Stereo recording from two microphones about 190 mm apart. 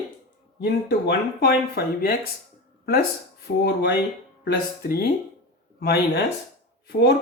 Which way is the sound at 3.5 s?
65° left (ahead or behind).